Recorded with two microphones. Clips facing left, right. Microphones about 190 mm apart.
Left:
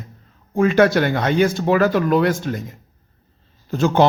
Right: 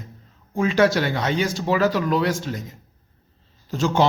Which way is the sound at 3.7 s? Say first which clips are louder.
Left 4 dB; 55° left (ahead or behind).